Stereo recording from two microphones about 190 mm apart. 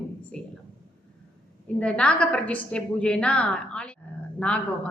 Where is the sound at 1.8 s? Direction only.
5° left (ahead or behind).